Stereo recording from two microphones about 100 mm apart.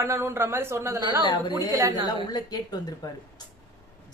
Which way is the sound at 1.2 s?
50° left (ahead or behind).